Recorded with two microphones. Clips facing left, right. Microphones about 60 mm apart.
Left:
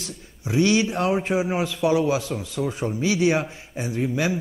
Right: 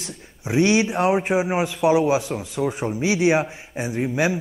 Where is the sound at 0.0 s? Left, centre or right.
Right.